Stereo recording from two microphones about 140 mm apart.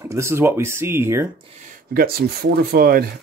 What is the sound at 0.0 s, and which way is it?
Speech, 20° right (ahead or behind).